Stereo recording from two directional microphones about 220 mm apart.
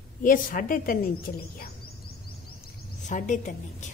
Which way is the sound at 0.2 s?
40° left (ahead or behind).